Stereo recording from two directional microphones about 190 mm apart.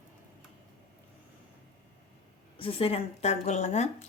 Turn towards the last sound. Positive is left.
turn(degrees=35)  # may be behind; listen again after turning